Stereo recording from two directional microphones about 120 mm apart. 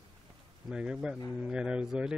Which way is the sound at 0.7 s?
5° right (ahead or behind).